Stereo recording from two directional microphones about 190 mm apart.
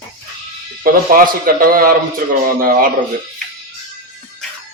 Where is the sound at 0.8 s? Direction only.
45° right (ahead or behind).